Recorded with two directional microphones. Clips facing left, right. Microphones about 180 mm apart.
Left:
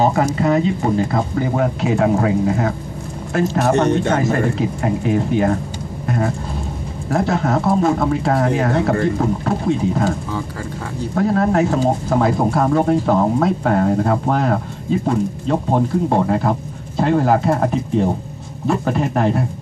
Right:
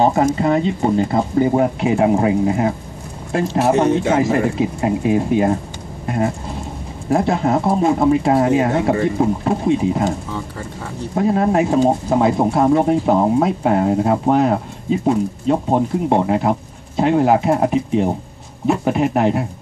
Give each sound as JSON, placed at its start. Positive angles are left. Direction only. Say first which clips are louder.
{"t": 0.0, "sound": "speech", "louder": "right 1 dB", "side_deg": -25}
{"t": 3.7, "sound": "speech", "louder": "right 2 dB", "side_deg": -5}
{"t": 6.0, "sound": "vehicle", "louder": "right 1 dB", "side_deg": -20}
{"t": 7.1, "sound": "speech", "louder": "right 2 dB", "side_deg": -20}
{"t": 11.1, "sound": "speech", "louder": "even", "side_deg": -15}